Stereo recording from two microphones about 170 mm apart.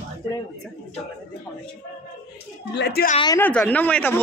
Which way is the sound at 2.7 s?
75° left (ahead or behind).